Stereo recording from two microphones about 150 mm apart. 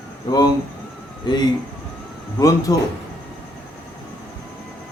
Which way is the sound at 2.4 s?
25° left (ahead or behind).